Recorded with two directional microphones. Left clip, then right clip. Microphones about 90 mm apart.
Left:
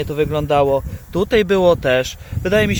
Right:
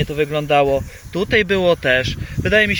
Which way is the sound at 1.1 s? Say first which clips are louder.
Left 1 dB; 30° left (ahead or behind).